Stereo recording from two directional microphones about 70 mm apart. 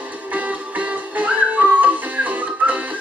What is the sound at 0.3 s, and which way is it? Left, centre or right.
Music, right.